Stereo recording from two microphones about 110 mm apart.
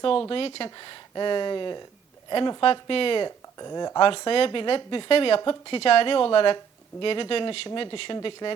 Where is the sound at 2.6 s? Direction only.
55° left (ahead or behind).